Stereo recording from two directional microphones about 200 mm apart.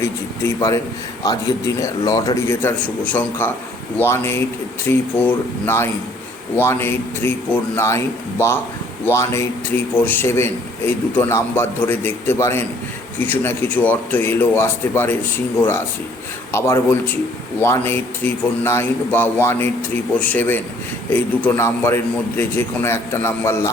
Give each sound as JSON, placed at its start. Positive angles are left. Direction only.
{"t": 0.0, "sound": "a man's voice", "side_deg": 15}
{"t": 16.5, "sound": "a man's voice", "side_deg": 15}